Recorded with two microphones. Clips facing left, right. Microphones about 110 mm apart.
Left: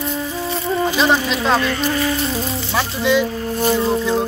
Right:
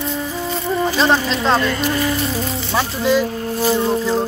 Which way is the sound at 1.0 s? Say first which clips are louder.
Right 1 dB; 5° left (ahead or behind).